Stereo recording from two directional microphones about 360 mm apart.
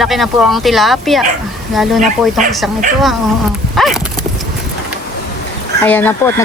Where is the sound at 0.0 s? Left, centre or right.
Centre.